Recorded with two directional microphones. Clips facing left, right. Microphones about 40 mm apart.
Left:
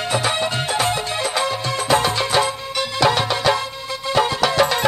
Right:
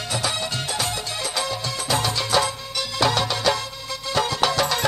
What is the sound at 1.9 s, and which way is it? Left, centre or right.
Music, left.